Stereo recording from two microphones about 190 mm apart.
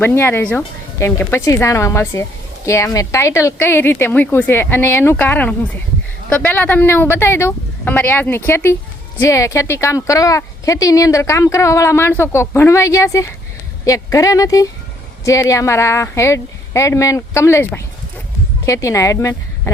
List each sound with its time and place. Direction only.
0.0 s speech: 10° left (ahead or behind)